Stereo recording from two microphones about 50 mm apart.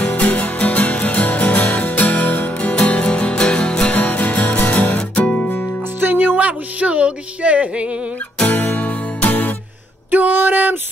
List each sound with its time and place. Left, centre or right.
0.0 s music: left
3.9 s music: left
5.9 s music: right
8.5 s music: left
10.1 s music: right